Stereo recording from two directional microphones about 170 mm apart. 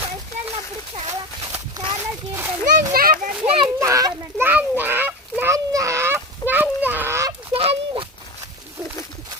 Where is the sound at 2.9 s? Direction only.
60° right (ahead or behind).